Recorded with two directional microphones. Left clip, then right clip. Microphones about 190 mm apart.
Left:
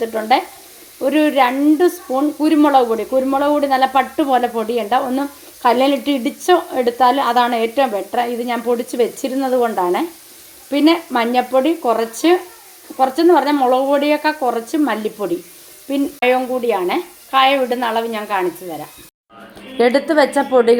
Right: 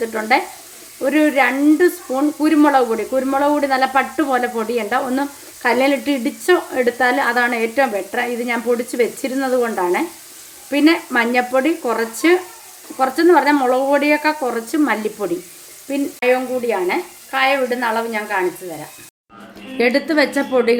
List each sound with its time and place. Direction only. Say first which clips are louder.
0.0 s sizzle: left 1 dB; 10° left (ahead or behind)
15.9 s speech: left 1 dB; 20° left (ahead or behind)
19.7 s a woman's voice: left 2 dB; 5° left (ahead or behind)